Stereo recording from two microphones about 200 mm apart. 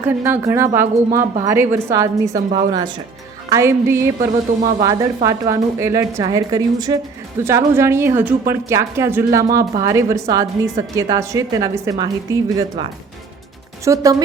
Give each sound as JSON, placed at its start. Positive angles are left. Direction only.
{"t": 0.0, "sound": "a woman's voice", "side_deg": -10}
{"t": 3.5, "sound": "a woman's voice", "side_deg": -10}
{"t": 13.8, "sound": "a woman's voice", "side_deg": -15}